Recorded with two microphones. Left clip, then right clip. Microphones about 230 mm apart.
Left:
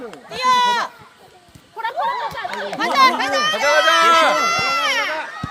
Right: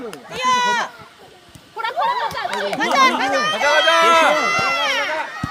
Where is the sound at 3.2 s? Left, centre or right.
Left.